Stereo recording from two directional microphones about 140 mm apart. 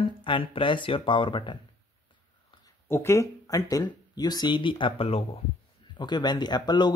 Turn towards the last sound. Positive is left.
turn(degrees=30)  # may be behind; listen again after turning